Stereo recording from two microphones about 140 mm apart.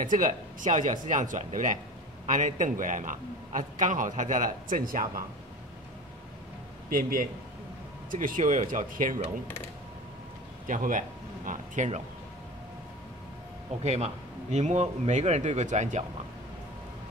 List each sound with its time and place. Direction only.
0.0 s a man's voice: 70° right (ahead or behind)
6.9 s a man's voice: 90° right
8.1 s a man's voice: 75° right (ahead or behind)
10.7 s speech: 70° right (ahead or behind)
13.8 s speech: 50° right (ahead or behind)